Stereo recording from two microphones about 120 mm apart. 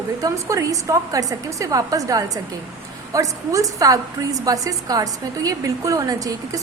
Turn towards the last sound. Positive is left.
turn(degrees=-30)  # may be behind; listen again after turning